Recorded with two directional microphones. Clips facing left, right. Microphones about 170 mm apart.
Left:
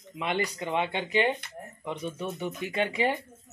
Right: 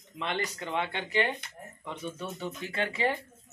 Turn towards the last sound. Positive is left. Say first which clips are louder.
# left 3 dB
turn(degrees=15)  # may be behind; listen again after turning